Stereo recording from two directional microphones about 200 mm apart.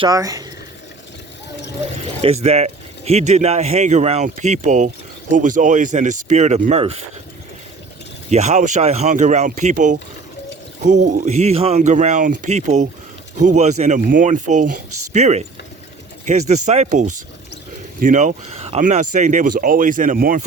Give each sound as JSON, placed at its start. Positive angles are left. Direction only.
{"t": 0.0, "sound": "speech", "side_deg": -15}
{"t": 2.2, "sound": "speech", "side_deg": -30}
{"t": 8.3, "sound": "speech", "side_deg": -35}